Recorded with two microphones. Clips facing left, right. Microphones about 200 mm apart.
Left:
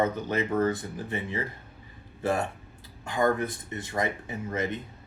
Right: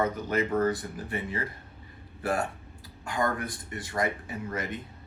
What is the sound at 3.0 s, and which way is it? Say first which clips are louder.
Speech: left 4 dB; 25° left (ahead or behind).